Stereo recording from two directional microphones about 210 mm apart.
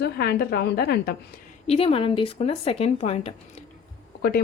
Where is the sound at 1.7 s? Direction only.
25° left (ahead or behind).